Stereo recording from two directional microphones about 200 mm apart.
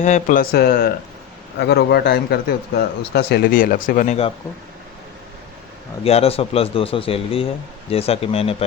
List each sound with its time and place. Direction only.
0.0 s speech: 40° left (ahead or behind)
6.0 s speech: 30° left (ahead or behind)